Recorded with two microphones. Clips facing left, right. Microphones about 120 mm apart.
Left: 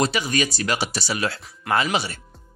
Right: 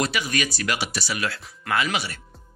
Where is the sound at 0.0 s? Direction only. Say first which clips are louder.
Left 3 dB; 30° left (ahead or behind).